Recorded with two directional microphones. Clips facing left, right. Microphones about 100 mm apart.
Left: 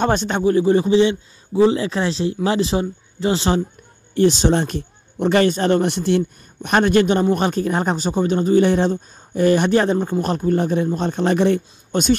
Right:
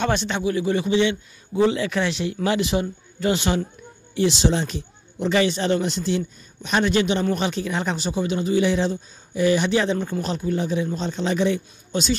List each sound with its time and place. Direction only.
0.0 s a man's voice: 40° left (ahead or behind)
4.1 s speech: 45° left (ahead or behind)
9.9 s a man's voice: 30° left (ahead or behind)
10.2 s speech: 50° left (ahead or behind)